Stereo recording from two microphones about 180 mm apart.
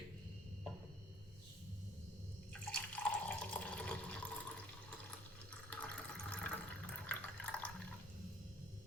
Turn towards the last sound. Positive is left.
turn(degrees=5)  # may be behind; listen again after turning